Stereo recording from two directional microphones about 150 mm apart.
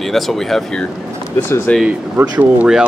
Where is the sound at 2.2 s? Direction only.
20° right (ahead or behind).